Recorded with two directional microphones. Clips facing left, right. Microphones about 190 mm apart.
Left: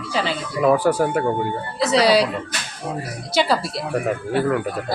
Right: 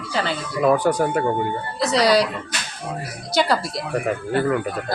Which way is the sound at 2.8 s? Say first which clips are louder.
Left 3 dB; 25° left (ahead or behind).